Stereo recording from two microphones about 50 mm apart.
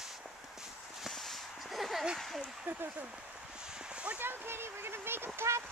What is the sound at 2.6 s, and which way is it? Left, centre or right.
Speech, right.